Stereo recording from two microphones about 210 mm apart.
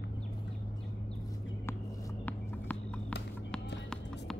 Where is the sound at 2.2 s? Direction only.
5° left (ahead or behind).